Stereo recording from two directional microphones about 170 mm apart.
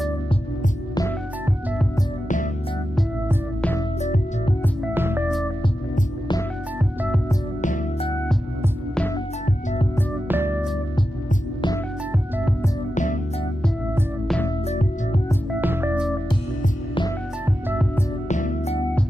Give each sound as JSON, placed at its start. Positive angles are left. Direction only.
{"t": 4.9, "sound": "music", "side_deg": -10}
{"t": 10.2, "sound": "music", "side_deg": -10}
{"t": 12.9, "sound": "music", "side_deg": 50}
{"t": 14.7, "sound": "music", "side_deg": 40}
{"t": 15.6, "sound": "music", "side_deg": -10}
{"t": 18.3, "sound": "music", "side_deg": 45}